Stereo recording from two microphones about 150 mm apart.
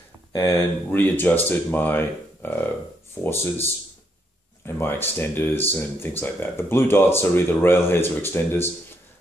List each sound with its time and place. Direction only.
0.3 s speech: 20° left (ahead or behind)